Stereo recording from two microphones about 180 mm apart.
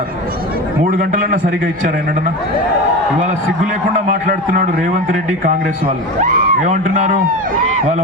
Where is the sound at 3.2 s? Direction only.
45° right (ahead or behind).